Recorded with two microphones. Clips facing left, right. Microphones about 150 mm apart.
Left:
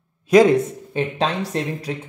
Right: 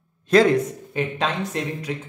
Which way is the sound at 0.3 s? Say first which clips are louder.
Left 3 dB; 15° left (ahead or behind).